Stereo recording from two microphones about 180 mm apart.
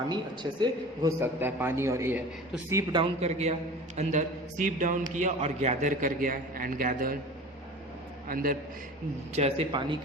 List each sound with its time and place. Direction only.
0.6 s a man's voice: 15° right (ahead or behind)
3.0 s a man's voice: 35° right (ahead or behind); by 7.2 s 50° right (ahead or behind)
8.3 s a man's voice: 50° right (ahead or behind)
9.3 s speech: 35° right (ahead or behind)